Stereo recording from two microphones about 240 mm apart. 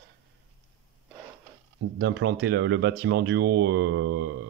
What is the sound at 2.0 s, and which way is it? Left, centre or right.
Speech, right.